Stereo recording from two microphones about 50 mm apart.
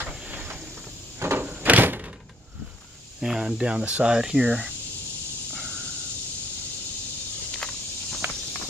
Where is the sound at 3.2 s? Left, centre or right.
Centre.